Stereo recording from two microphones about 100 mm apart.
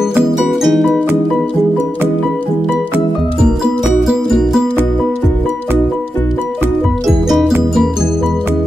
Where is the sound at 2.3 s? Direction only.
15° left (ahead or behind).